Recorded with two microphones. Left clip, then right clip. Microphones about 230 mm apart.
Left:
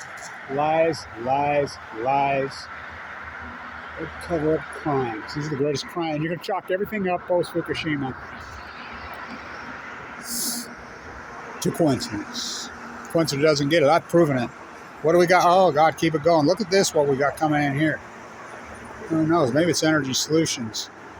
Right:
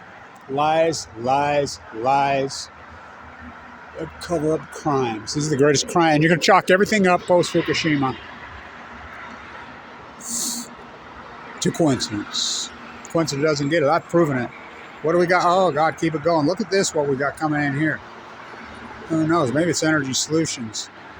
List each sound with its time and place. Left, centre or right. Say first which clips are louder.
0.5 s speech: right 2 dB; right
4.3 s speech: right 1 dB; right
10.3 s a sound: right 3 dB; centre
11.6 s speech: right 2 dB; centre
13.1 s speech: left 1 dB; centre
19.3 s speech: even; centre